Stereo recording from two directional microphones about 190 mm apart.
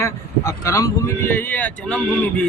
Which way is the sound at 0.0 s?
15° left (ahead or behind).